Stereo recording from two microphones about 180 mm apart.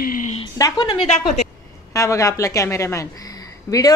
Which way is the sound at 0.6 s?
20° left (ahead or behind).